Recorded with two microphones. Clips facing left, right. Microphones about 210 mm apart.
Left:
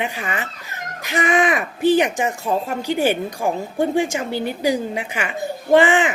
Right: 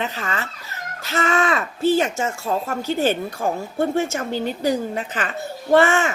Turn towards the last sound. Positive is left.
turn(degrees=15)  # may be behind; listen again after turning